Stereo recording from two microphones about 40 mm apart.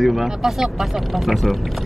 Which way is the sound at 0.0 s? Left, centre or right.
Centre.